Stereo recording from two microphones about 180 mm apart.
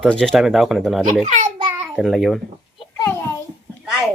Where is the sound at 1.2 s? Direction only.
40° right (ahead or behind).